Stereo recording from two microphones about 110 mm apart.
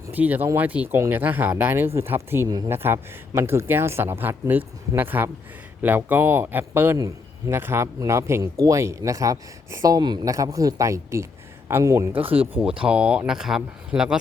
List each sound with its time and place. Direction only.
0.1 s speech: 15° right (ahead or behind)
12.1 s speech: 55° right (ahead or behind)
12.8 s speech: 10° right (ahead or behind)